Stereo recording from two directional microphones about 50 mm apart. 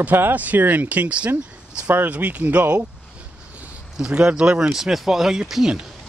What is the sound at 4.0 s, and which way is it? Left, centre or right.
Speech, centre.